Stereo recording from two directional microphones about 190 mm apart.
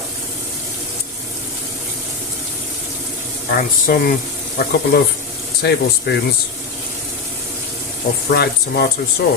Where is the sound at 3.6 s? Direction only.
50° left (ahead or behind).